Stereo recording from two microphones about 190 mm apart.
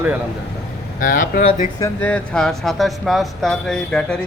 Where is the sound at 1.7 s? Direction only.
10° left (ahead or behind).